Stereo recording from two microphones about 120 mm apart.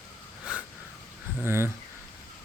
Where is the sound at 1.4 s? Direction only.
20° right (ahead or behind).